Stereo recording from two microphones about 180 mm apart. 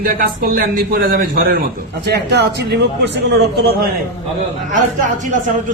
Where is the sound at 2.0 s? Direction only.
70° right (ahead or behind).